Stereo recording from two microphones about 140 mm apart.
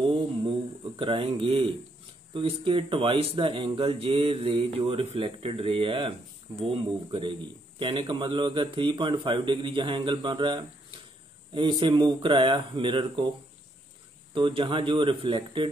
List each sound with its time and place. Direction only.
0.0 s a sound: 35° right (ahead or behind)
2.3 s speech: 40° right (ahead or behind)
14.3 s speech: 35° right (ahead or behind)